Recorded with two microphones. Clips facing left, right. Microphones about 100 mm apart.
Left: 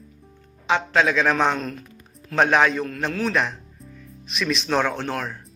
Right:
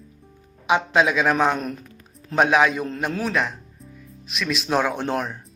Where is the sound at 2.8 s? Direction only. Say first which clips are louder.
Right 1 dB; 15° right (ahead or behind).